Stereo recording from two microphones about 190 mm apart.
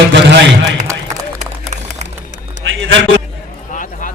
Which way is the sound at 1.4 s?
35° right (ahead or behind).